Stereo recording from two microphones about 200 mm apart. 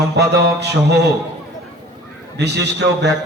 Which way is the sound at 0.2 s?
55° right (ahead or behind).